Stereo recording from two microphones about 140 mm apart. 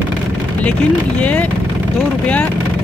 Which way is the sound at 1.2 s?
10° left (ahead or behind).